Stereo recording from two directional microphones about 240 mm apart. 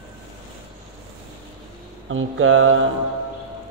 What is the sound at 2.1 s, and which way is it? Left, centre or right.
Speech, right.